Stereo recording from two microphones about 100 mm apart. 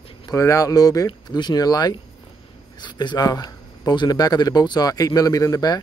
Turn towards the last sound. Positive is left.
turn(degrees=35)  # may be behind; listen again after turning